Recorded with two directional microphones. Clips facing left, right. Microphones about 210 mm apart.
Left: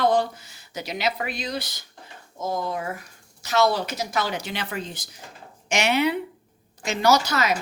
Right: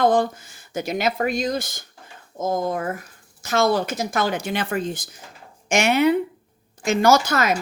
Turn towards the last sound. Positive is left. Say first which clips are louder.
# right 3 dB
turn(degrees=-50)  # may be behind; listen again after turning